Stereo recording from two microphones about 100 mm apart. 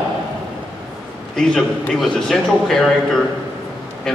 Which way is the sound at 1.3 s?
5° left (ahead or behind).